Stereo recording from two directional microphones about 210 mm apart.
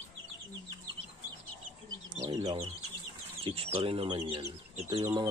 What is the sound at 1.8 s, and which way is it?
Bird, 20° right (ahead or behind).